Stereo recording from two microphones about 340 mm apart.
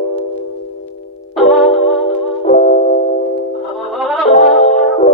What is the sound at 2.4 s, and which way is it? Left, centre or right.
Music, centre.